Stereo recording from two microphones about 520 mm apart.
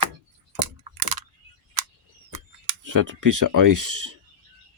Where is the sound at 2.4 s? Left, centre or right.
Right.